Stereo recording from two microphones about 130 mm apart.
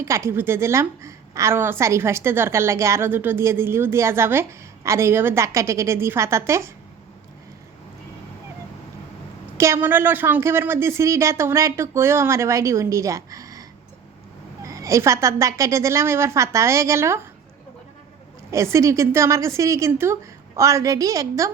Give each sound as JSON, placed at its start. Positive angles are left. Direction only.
{"t": 0.0, "sound": "a woman's voice", "side_deg": -25}
{"t": 9.6, "sound": "a woman's voice", "side_deg": -20}
{"t": 18.5, "sound": "a woman's voice", "side_deg": -20}